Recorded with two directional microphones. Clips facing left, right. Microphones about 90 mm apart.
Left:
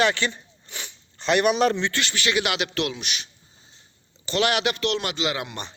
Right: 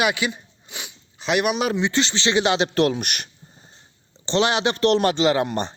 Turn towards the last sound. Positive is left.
turn(degrees=-40)  # may be behind; listen again after turning